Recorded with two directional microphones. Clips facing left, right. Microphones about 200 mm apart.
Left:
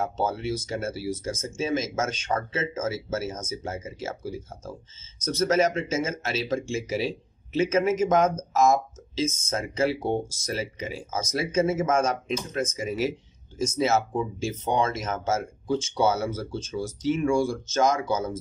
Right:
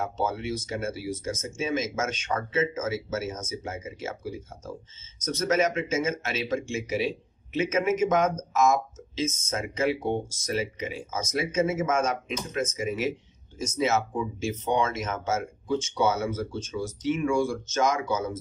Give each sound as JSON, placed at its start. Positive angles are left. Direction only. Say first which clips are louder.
{"t": 0.0, "sound": "speech", "louder": "left 2 dB", "side_deg": 35}